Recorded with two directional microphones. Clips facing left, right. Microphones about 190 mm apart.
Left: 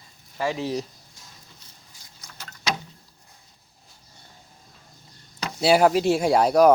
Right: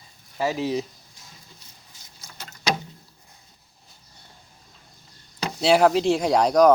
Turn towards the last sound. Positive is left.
turn(degrees=5)  # may be behind; listen again after turning